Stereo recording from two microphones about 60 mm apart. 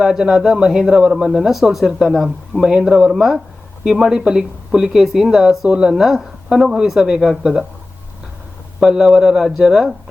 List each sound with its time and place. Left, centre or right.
0.0 s speech: centre
8.8 s a man's voice: centre